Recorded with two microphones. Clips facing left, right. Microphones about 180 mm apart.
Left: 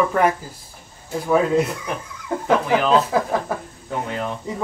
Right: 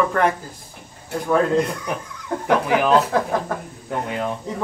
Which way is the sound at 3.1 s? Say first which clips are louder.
Even; 5° left (ahead or behind).